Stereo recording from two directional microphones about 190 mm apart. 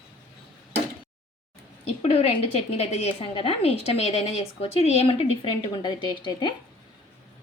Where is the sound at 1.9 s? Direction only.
30° left (ahead or behind).